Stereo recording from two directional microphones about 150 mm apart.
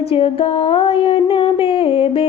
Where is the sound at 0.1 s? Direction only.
40° left (ahead or behind).